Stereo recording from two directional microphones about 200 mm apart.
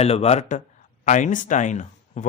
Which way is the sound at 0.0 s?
30° left (ahead or behind).